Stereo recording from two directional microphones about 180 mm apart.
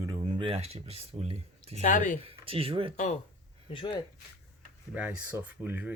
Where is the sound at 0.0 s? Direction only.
25° right (ahead or behind).